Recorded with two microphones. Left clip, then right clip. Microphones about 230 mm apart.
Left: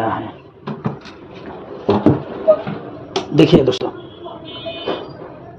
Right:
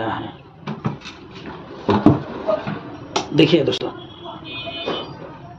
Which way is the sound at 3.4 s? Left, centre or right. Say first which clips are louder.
Left 4 dB; centre.